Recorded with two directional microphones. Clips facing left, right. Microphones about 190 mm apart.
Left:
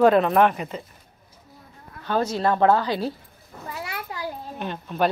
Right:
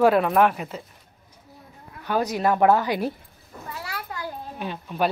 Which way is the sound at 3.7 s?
20° left (ahead or behind).